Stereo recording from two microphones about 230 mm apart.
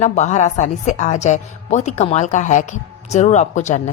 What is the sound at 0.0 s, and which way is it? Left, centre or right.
A woman's voice, left.